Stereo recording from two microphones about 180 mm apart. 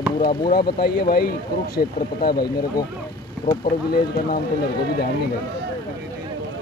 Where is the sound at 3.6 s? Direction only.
55° left (ahead or behind).